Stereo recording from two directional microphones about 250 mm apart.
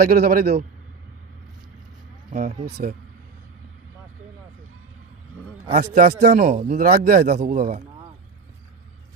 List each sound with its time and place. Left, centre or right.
0.0 s a man's voice: right
2.3 s a man's voice: right
5.8 s a man's voice: right